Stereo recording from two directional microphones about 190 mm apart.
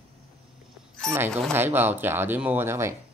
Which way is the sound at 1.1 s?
15° right (ahead or behind).